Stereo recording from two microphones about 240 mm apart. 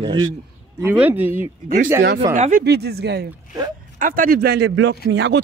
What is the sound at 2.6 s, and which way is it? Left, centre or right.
Speech, right.